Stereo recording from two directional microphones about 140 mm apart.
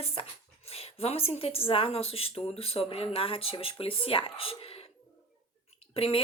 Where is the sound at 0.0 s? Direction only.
45° left (ahead or behind).